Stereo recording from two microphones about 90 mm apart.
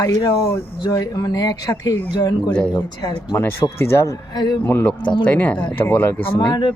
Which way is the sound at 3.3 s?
25° left (ahead or behind).